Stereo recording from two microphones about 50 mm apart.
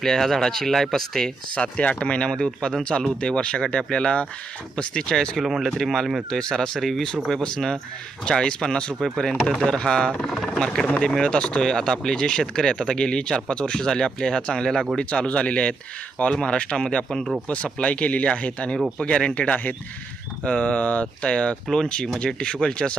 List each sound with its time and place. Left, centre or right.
0.0 s speech: centre
1.5 s speech: left
5.4 s speech: centre
5.7 s speech: centre; by 21.2 s left
21.2 s speech: centre